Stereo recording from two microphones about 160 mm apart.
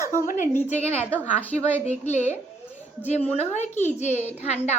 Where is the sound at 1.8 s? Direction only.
45° left (ahead or behind).